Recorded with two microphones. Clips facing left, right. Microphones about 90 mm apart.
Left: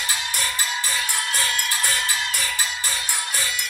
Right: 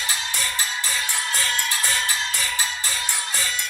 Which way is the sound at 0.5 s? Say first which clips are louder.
Left 1 dB; 15° left (ahead or behind).